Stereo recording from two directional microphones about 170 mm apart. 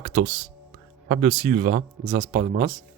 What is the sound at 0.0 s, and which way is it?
Music, 45° right (ahead or behind).